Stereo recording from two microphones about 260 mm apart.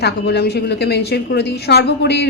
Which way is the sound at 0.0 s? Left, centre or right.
Left.